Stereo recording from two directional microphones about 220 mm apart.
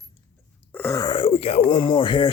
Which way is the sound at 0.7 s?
10° left (ahead or behind).